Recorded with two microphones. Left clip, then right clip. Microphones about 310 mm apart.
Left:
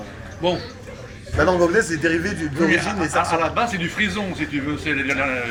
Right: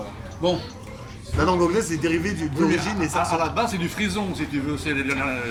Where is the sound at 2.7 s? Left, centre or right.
Centre.